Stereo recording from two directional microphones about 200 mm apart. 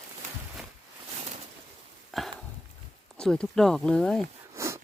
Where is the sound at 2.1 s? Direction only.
Centre (ahead or behind).